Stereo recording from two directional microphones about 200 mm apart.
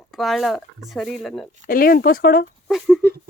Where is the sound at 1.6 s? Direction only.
45° left (ahead or behind).